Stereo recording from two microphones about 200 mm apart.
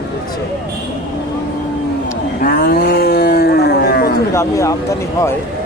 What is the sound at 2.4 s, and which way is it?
Speech, 45° left (ahead or behind).